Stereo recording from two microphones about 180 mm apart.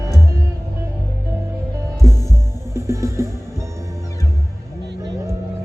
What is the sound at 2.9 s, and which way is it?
Music, 15° right (ahead or behind).